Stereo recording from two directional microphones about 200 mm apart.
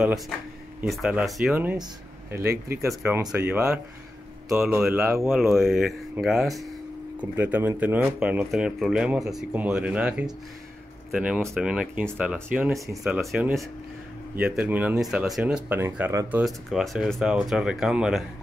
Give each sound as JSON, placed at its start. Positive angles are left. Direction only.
{"t": 0.7, "sound": "speech", "side_deg": -5}
{"t": 2.9, "sound": "speech", "side_deg": -5}
{"t": 13.0, "sound": "speech", "side_deg": 0}